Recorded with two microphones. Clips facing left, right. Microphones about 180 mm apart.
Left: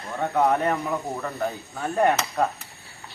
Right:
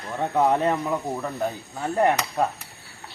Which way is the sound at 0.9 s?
10° right (ahead or behind).